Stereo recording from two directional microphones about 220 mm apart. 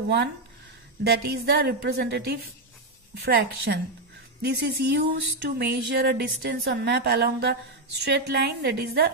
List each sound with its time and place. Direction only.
1.0 s speech: 45° right (ahead or behind)